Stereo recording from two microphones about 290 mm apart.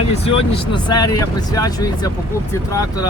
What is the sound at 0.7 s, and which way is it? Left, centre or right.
Speech, centre.